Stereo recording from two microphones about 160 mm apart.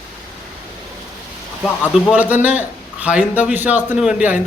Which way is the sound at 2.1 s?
10° right (ahead or behind).